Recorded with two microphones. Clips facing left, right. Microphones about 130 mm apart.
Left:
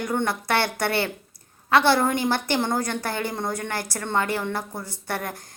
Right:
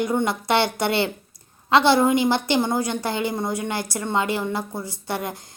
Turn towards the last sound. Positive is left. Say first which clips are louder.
# right 2 dB
turn(degrees=-15)  # may be behind; listen again after turning